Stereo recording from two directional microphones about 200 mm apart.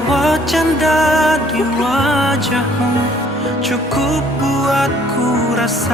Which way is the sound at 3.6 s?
Centre (ahead or behind).